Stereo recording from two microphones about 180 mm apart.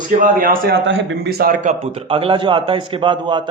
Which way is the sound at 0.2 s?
50° right (ahead or behind).